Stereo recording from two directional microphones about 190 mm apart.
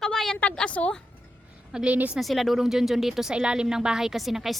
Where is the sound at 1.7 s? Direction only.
5° right (ahead or behind).